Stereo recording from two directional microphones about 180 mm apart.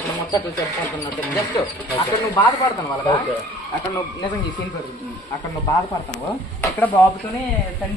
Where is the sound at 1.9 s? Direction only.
20° left (ahead or behind).